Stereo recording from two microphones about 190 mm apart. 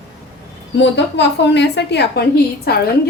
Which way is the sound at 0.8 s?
65° left (ahead or behind).